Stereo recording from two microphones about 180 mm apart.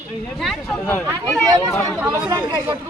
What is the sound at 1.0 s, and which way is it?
Speech, 20° right (ahead or behind).